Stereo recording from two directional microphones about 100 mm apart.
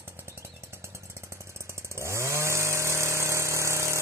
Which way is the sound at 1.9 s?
30° right (ahead or behind).